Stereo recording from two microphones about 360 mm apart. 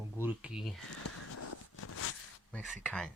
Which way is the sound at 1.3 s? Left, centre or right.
Left.